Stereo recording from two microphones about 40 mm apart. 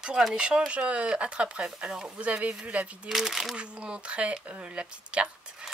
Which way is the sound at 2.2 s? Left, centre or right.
Right.